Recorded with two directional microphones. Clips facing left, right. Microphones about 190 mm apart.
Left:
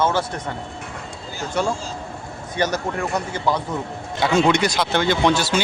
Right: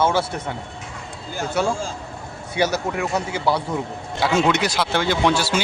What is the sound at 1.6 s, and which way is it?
Speech, 5° right (ahead or behind).